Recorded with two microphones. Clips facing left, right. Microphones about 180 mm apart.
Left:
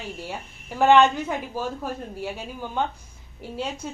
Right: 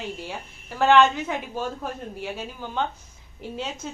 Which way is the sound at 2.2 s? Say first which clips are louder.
Left 1 dB; 10° left (ahead or behind).